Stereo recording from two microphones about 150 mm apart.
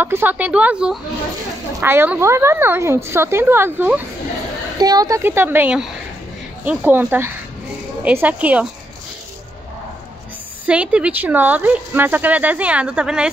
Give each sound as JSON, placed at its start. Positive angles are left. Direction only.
{"t": 0.0, "sound": "speech", "side_deg": -15}
{"t": 4.7, "sound": "speech", "side_deg": -25}
{"t": 10.7, "sound": "speech", "side_deg": -10}